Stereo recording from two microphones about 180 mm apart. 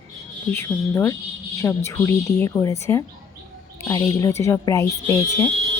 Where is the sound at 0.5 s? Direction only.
15° left (ahead or behind).